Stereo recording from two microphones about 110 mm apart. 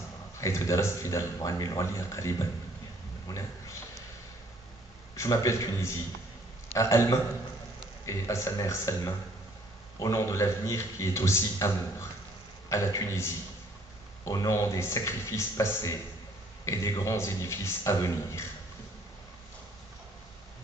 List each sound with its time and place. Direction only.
0.4 s a man's voice: 25° left (ahead or behind)
5.1 s a man's voice: 25° left (ahead or behind)